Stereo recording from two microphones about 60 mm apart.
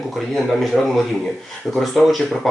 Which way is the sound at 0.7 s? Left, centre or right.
Centre.